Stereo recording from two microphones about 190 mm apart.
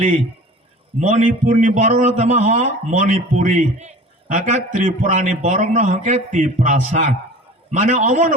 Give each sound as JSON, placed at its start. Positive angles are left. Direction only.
{"t": 0.9, "sound": "a man's voice", "side_deg": -40}